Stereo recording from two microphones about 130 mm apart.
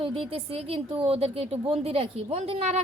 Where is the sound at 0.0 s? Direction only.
45° right (ahead or behind).